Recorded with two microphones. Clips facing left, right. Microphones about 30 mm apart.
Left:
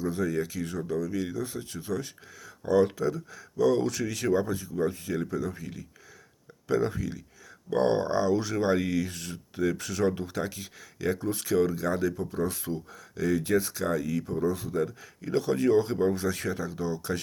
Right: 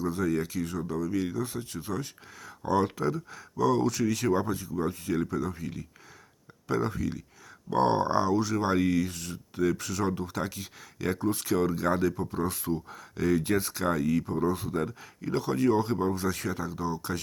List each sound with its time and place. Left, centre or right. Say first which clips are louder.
0.0 s speech: even; centre
2.4 s speech: left 3 dB; right
3.6 s speech: left 1 dB; centre
4.3 s speech: left 1 dB; centre
8.4 s speech: even; centre
10.9 s speech: left 1 dB; centre
11.3 s speech: left 1 dB; centre
11.7 s speech: right 1 dB; right
14.3 s speech: even; right
14.5 s speech: left 1 dB; centre